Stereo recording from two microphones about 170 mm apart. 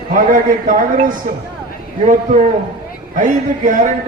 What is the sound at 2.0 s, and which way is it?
A man's voice, 45° right (ahead or behind).